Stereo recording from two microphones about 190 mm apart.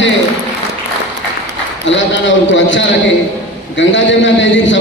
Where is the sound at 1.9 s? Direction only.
75° left (ahead or behind).